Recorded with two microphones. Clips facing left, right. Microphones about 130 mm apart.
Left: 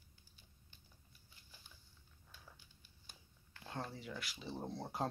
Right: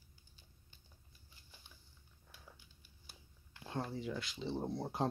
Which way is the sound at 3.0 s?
15° right (ahead or behind).